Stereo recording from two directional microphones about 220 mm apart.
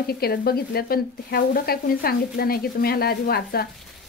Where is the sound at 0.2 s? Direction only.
45° left (ahead or behind).